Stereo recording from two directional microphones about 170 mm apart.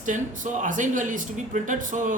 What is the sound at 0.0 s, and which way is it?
Speech, 50° right (ahead or behind).